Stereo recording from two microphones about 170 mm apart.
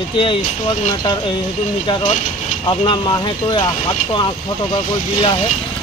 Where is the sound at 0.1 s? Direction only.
30° left (ahead or behind).